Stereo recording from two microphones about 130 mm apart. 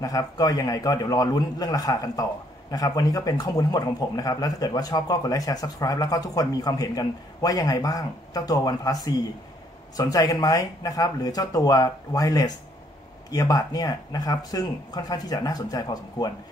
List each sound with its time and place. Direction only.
0.0 s a man's voice: 30° left (ahead or behind)